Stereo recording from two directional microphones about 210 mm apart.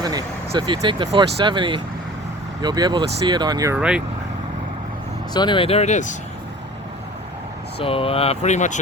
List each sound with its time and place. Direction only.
0.0 s speech: 20° right (ahead or behind)
3.8 s speech: 5° right (ahead or behind)
5.3 s speech: 20° left (ahead or behind)
7.8 s speech: 25° left (ahead or behind)